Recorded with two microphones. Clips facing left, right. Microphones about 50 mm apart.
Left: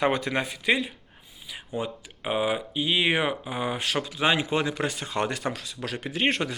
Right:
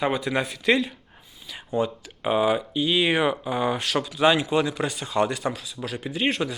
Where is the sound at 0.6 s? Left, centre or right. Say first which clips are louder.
Right 5 dB; centre.